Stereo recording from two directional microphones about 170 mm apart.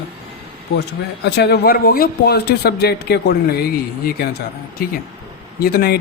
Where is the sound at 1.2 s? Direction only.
75° left (ahead or behind).